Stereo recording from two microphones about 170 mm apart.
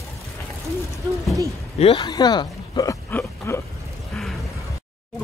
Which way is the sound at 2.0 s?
25° left (ahead or behind).